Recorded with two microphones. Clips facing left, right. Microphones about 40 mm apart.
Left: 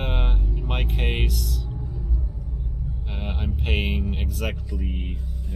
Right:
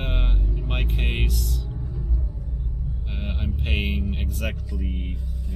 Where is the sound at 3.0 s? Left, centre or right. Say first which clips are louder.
Left 1 dB; centre.